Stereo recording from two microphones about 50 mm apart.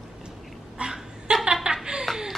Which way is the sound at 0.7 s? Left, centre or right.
Centre.